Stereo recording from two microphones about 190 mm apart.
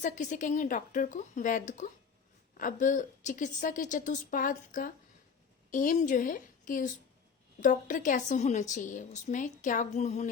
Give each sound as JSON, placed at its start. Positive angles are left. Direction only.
{"t": 0.0, "sound": "a woman's voice", "side_deg": 40}